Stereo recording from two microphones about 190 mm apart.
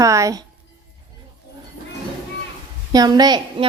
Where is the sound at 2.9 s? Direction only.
20° right (ahead or behind).